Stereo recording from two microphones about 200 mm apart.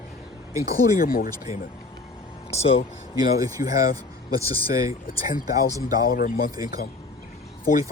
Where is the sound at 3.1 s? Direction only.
20° right (ahead or behind).